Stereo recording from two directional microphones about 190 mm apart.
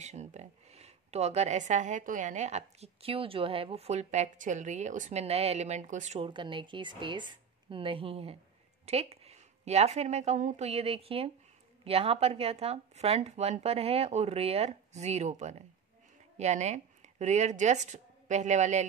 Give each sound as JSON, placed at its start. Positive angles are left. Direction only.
{"t": 0.0, "sound": "a woman's voice", "side_deg": -35}